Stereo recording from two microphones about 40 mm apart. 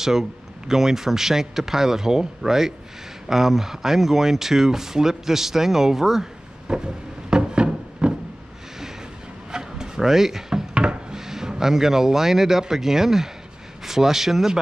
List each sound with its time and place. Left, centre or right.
0.0 s speech: centre
6.7 s a sound: centre
9.5 s rub: centre
10.7 s wood: right
11.1 s speech: centre